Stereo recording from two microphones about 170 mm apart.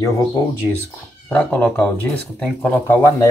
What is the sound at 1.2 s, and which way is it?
Speech, 10° left (ahead or behind).